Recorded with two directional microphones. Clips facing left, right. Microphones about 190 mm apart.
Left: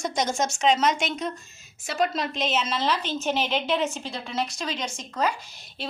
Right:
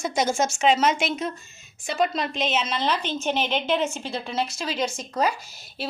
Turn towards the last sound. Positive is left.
turn(degrees=-5)  # may be behind; listen again after turning